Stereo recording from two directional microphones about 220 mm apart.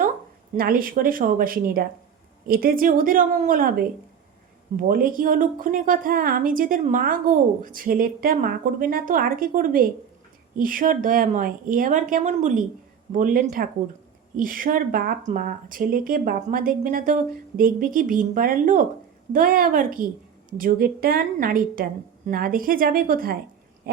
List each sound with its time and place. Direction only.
0.5 s a woman's voice: 40° right (ahead or behind)
23.9 s owl: 45° right (ahead or behind)